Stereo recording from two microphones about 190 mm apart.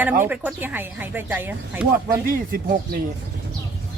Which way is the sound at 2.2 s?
50° right (ahead or behind).